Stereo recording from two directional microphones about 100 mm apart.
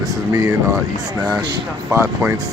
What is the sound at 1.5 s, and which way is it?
Speech, 35° right (ahead or behind).